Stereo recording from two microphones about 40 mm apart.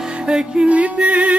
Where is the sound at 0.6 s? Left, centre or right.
Right.